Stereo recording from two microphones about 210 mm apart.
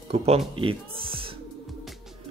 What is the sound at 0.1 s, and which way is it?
Speech, 30° right (ahead or behind).